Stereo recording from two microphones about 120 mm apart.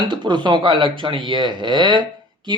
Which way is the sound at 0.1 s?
40° right (ahead or behind).